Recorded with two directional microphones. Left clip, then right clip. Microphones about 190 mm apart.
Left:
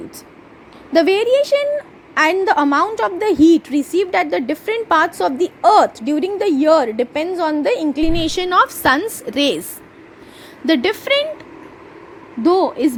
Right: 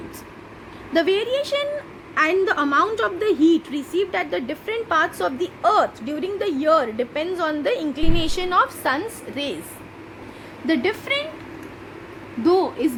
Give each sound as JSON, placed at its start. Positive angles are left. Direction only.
{"t": 0.9, "sound": "a woman's voice", "side_deg": 30}
{"t": 10.7, "sound": "a woman's voice", "side_deg": 40}
{"t": 12.4, "sound": "a woman's voice", "side_deg": 35}